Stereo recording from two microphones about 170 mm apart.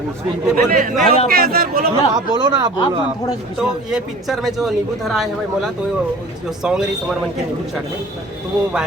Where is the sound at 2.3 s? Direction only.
25° right (ahead or behind).